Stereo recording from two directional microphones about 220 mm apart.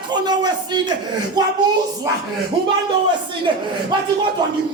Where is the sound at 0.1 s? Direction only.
20° right (ahead or behind).